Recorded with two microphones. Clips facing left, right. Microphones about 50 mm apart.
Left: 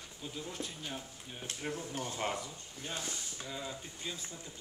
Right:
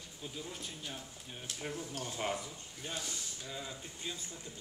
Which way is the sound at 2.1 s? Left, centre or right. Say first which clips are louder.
Right 2 dB; centre.